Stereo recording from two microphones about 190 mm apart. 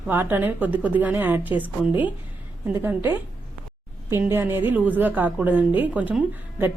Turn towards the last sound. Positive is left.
turn(degrees=-5)  # may be behind; listen again after turning